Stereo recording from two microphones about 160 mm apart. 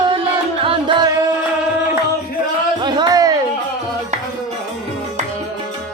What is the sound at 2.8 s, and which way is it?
Music, 25° right (ahead or behind).